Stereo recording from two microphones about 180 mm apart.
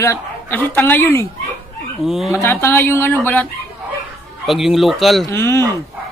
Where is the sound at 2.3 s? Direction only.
15° left (ahead or behind).